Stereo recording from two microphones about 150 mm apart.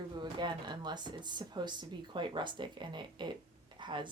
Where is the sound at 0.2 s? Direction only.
30° right (ahead or behind).